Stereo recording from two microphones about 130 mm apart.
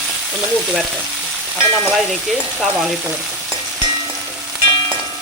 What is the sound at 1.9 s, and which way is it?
Stir, centre (ahead or behind).